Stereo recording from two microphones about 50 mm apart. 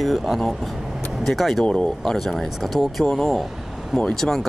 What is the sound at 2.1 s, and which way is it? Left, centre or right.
Speech, centre.